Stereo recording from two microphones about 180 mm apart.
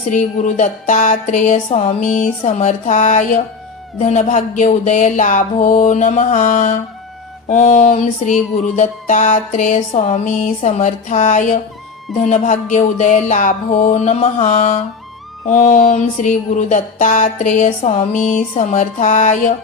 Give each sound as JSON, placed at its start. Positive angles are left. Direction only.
{"t": 0.1, "sound": "music", "side_deg": 45}